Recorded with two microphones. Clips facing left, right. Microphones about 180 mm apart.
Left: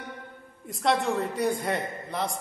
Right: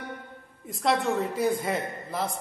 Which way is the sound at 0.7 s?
Centre (ahead or behind).